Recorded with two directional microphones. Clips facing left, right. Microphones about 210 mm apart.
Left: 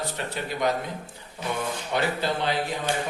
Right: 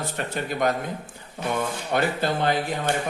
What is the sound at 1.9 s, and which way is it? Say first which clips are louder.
Speech: right 3 dB; 50° right (ahead or behind).